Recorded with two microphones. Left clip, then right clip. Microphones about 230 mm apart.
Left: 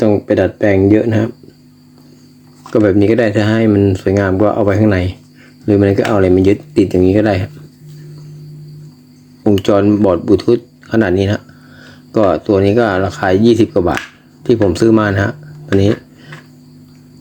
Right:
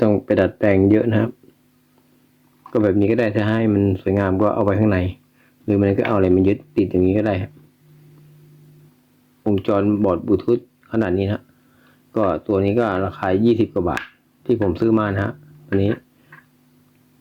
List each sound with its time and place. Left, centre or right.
0.0 s speech: centre
2.6 s speech: centre
9.4 s speech: centre